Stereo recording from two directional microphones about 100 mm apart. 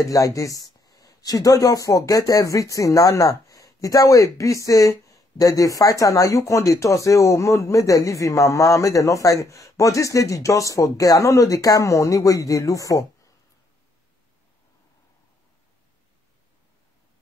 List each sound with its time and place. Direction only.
0.0 s speech: 35° left (ahead or behind)